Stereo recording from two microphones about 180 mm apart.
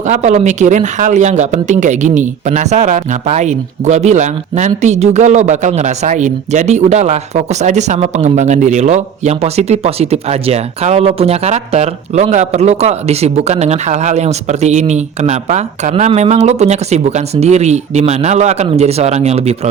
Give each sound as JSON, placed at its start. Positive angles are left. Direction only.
{"t": 0.0, "sound": "speech", "side_deg": -40}